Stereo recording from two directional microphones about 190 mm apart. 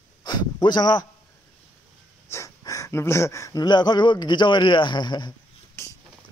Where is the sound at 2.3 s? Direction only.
15° left (ahead or behind).